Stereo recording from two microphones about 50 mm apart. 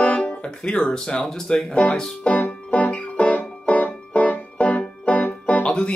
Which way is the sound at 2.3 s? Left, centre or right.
Left.